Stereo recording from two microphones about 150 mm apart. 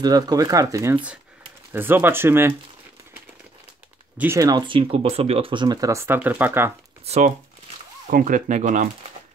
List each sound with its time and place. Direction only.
0.0 s speech: 25° right (ahead or behind)
4.2 s speech: 20° right (ahead or behind)
7.1 s speech: 50° right (ahead or behind)
8.1 s speech: 65° right (ahead or behind)